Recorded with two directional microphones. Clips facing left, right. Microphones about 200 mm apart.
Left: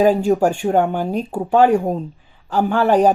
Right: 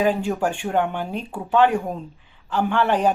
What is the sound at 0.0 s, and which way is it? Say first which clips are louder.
Speech: left 7 dB; 40° left (ahead or behind).